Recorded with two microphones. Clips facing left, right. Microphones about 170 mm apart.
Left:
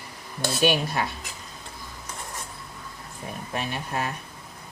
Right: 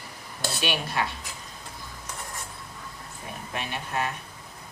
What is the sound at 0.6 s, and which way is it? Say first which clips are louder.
Speech: left 6 dB; 45° left (ahead or behind).